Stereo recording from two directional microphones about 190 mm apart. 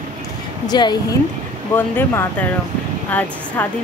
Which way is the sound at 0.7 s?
25° left (ahead or behind).